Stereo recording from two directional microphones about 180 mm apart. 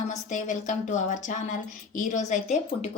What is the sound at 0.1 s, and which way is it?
Speech, 45° left (ahead or behind).